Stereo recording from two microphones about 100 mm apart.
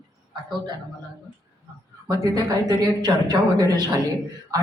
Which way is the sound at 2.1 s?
35° right (ahead or behind).